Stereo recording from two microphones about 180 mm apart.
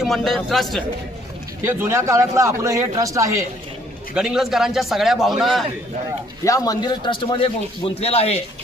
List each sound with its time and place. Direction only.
0.0 s a man's voice: centre (ahead or behind)
1.6 s a man's voice: 10° right (ahead or behind)
4.1 s a man's voice: 5° right (ahead or behind)
6.4 s a man's voice: 20° left (ahead or behind); by 8.4 s 35° left (ahead or behind)